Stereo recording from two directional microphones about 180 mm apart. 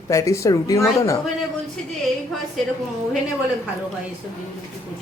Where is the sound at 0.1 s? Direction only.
15° left (ahead or behind).